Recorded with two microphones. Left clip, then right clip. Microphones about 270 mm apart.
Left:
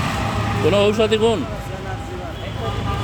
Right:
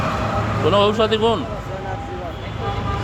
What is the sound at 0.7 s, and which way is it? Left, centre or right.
Speech, centre.